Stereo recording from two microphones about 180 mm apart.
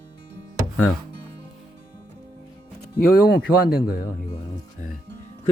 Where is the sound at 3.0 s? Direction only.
55° left (ahead or behind).